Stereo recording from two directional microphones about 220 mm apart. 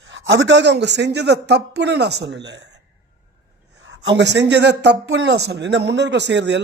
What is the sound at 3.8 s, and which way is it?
A man's voice, 55° right (ahead or behind).